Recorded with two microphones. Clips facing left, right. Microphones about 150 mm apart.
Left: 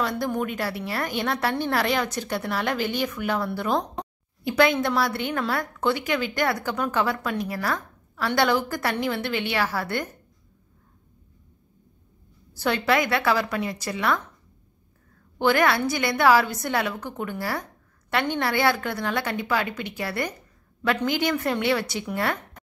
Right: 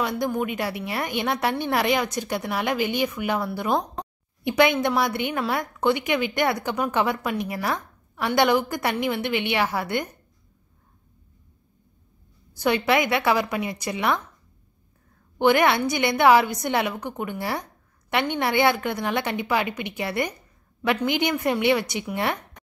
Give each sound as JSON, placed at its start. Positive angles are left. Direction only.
{"t": 0.2, "sound": "a woman's voice", "side_deg": -10}
{"t": 12.5, "sound": "a woman's voice", "side_deg": -15}
{"t": 15.3, "sound": "a woman's voice", "side_deg": -15}